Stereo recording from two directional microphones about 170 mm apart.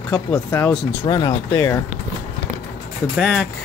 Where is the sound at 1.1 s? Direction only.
25° left (ahead or behind).